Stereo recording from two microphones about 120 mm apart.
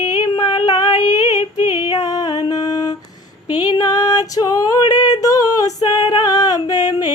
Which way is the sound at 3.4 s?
15° right (ahead or behind).